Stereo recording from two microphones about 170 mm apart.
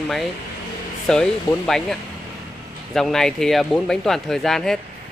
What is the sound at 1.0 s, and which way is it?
Speech, 5° left (ahead or behind).